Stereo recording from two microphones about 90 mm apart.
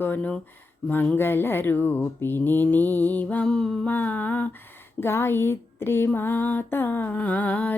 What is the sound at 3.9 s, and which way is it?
Speech, 20° left (ahead or behind).